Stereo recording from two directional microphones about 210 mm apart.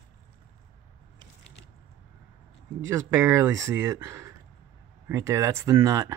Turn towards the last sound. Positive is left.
turn(degrees=-15)  # may be behind; listen again after turning